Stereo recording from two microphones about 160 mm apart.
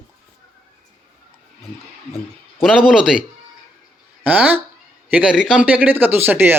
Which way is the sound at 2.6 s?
5° right (ahead or behind).